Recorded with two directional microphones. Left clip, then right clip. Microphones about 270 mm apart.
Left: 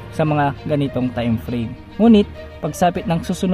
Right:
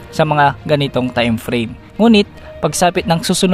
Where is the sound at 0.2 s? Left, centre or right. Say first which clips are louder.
Right 6 dB; right.